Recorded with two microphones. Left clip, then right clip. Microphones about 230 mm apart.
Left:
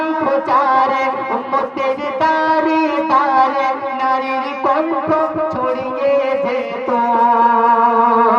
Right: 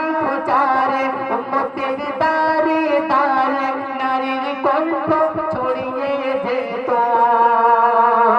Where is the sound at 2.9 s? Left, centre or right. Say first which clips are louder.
Left 3 dB; left.